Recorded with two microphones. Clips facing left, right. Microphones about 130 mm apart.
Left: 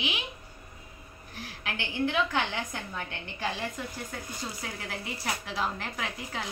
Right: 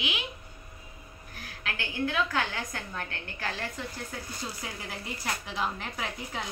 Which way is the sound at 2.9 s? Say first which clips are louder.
Even; 15° left (ahead or behind).